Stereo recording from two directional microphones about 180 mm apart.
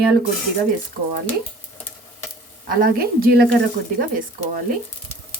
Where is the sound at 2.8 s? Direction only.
55° right (ahead or behind).